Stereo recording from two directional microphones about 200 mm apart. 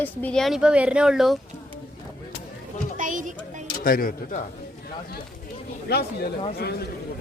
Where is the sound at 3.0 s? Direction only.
40° right (ahead or behind).